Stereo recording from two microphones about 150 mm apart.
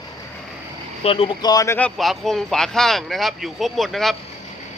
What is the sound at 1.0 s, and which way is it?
Speech, 40° left (ahead or behind).